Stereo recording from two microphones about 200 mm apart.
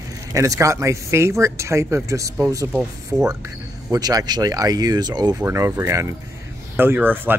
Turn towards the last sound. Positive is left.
turn(degrees=-10)  # may be behind; listen again after turning